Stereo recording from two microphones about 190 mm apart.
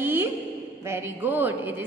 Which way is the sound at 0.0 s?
10° right (ahead or behind).